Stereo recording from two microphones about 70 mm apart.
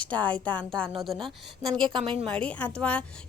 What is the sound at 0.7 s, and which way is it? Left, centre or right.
Speech, centre.